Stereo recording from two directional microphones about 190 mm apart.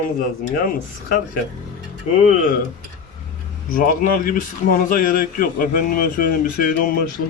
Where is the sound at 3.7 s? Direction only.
45° left (ahead or behind).